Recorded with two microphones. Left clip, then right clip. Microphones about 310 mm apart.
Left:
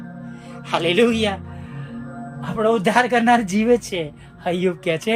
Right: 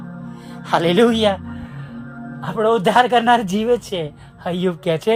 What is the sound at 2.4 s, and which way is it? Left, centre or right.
Speech, centre.